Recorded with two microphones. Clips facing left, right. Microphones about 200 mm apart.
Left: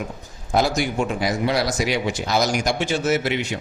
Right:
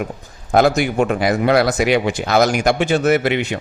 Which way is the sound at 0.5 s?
60° right (ahead or behind).